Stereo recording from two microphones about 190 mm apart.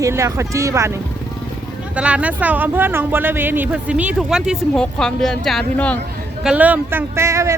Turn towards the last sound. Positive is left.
turn(degrees=-15)  # may be behind; listen again after turning